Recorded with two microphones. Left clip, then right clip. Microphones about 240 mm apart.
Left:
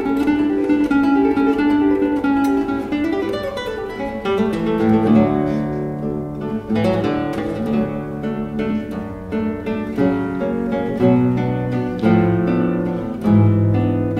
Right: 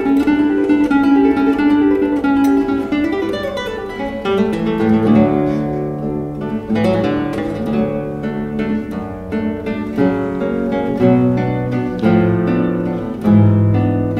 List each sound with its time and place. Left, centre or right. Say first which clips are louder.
0.0 s music: right 4 dB; right
4.3 s music: right 2 dB; right
6.7 s music: right 3 dB; right
9.9 s music: right 3 dB; right